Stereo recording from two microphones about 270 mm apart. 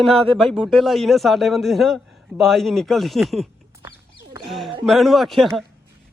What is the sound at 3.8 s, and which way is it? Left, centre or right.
Wild animals, centre.